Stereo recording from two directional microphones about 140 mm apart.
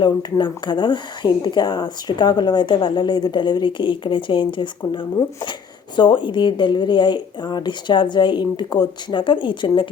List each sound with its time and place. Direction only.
0.0 s a woman's voice: 30° left (ahead or behind)